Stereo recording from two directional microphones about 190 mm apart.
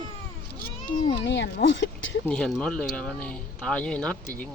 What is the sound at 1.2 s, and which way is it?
Speech, 65° left (ahead or behind).